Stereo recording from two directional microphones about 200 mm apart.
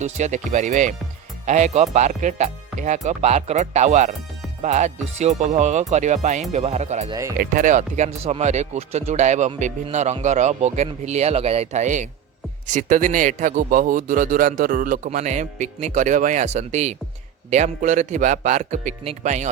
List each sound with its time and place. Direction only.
0.0 s a man's voice: 35° right (ahead or behind)
7.1 s speech: 15° right (ahead or behind)
7.3 s a man's voice: 40° right (ahead or behind)